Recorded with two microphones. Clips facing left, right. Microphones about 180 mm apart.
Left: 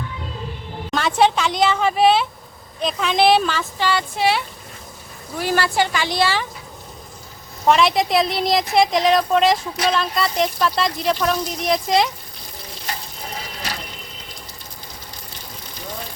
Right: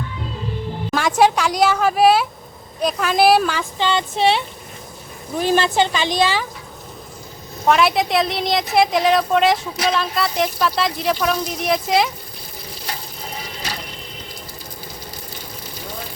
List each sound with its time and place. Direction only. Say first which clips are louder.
0.9 s a woman's voice: right 1 dB; 10° right (ahead or behind)
7.7 s a woman's voice: even; centre (ahead or behind)